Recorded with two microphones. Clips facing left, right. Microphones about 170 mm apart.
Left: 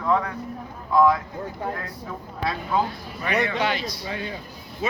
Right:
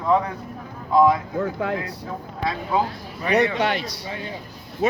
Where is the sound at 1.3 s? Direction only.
85° right.